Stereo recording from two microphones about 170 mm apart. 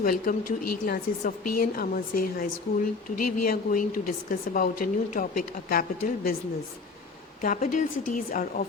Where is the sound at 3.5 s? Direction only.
55° left (ahead or behind).